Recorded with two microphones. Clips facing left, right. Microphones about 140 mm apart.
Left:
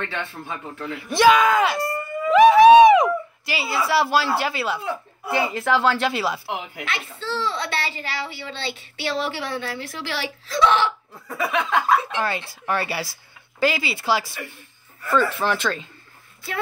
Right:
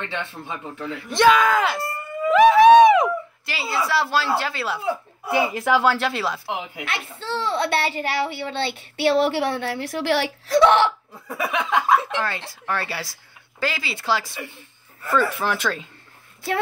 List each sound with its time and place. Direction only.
0.0 s speech: 15° right (ahead or behind)
0.8 s speech: 10° left (ahead or behind)
4.6 s speech: 5° right (ahead or behind)
7.2 s a child's voice: 60° right (ahead or behind)
11.2 s speech: 15° right (ahead or behind)
12.2 s speech: 15° left (ahead or behind)
15.0 s speech: 10° right (ahead or behind)